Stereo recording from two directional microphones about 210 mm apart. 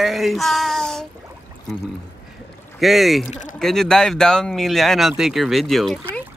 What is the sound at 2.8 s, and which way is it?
Speech, centre (ahead or behind).